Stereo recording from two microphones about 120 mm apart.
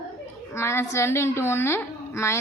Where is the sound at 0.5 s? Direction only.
20° left (ahead or behind).